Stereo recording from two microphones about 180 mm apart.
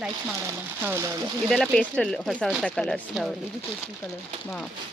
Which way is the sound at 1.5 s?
5° left (ahead or behind).